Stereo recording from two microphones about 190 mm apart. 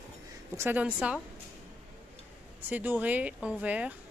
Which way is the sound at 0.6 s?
10° right (ahead or behind).